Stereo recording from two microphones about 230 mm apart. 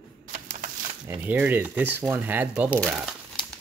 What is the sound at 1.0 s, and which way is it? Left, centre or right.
A man's voice, centre.